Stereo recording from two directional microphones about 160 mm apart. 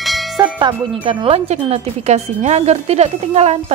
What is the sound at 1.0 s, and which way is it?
Speech, 35° right (ahead or behind).